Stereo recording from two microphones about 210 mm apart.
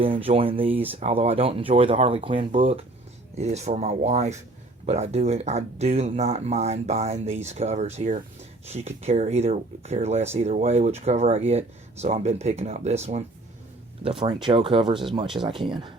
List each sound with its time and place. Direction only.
0.0 s speech: 25° right (ahead or behind)